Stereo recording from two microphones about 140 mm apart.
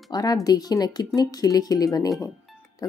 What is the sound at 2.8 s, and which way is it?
Music, 25° left (ahead or behind).